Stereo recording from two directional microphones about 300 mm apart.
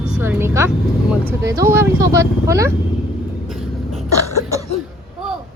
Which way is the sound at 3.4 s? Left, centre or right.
Centre.